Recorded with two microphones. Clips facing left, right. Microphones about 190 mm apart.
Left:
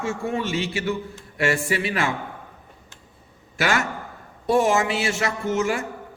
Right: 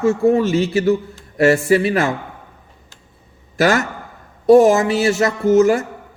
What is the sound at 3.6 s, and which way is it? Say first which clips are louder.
A man's voice: right 7 dB; 40° right (ahead or behind).